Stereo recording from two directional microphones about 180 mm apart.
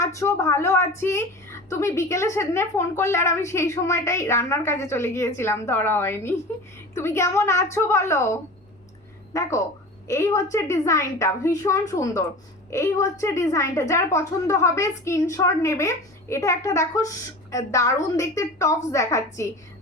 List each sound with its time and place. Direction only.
0.0 s a woman's voice: 15° left (ahead or behind)